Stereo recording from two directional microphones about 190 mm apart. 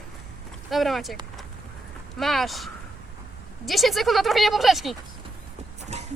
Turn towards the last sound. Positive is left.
turn(degrees=-35)  # may be behind; listen again after turning